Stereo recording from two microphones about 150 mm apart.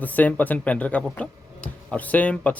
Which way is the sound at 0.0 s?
10° left (ahead or behind).